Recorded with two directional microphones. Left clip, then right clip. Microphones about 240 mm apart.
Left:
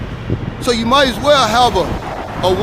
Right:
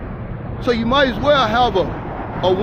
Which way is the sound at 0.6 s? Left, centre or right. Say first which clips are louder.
Left 3 dB; centre.